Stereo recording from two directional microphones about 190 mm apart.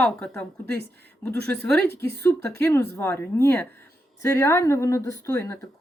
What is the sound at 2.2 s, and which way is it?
Speech, 15° left (ahead or behind).